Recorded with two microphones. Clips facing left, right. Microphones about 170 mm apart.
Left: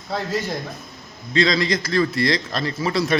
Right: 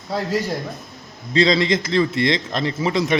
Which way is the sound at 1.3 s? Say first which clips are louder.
Right 3 dB; 30° right (ahead or behind).